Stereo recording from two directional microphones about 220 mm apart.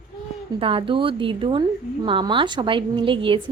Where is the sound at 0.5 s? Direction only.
25° right (ahead or behind).